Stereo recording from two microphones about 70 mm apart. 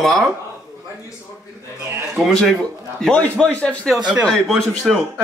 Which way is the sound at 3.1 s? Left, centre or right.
Centre.